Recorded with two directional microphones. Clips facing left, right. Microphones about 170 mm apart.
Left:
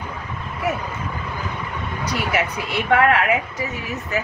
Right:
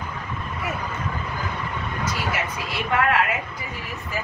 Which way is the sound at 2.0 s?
65° left (ahead or behind).